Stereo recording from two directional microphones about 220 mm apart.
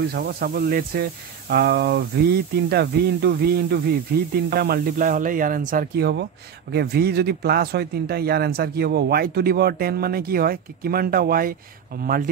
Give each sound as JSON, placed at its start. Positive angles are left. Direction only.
{"t": 0.1, "sound": "speech", "side_deg": -45}